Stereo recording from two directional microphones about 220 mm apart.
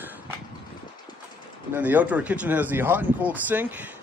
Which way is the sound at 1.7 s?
10° right (ahead or behind).